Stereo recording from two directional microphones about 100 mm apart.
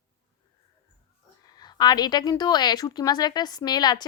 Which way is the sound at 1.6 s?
45° left (ahead or behind).